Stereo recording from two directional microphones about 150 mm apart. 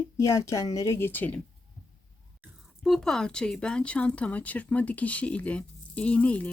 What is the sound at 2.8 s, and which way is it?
Speech, centre (ahead or behind).